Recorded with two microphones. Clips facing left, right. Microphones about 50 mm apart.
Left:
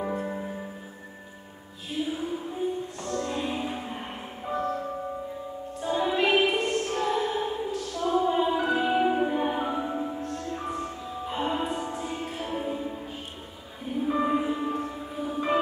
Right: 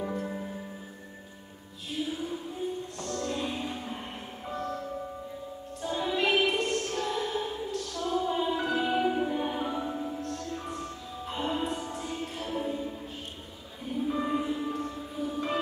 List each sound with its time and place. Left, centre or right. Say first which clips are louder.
0.0 s music: left 3 dB; centre
2.0 s music: left 3 dB; centre
10.2 s music: left 3 dB; centre